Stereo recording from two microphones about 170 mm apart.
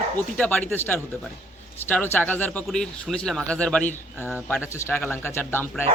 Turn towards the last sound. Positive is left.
turn(degrees=15)  # may be behind; listen again after turning